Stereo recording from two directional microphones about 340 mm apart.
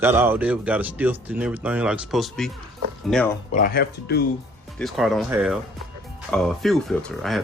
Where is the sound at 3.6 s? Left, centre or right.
Left.